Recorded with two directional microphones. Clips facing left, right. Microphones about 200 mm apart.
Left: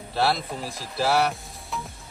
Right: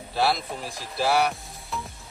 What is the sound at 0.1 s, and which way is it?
Speech, centre (ahead or behind).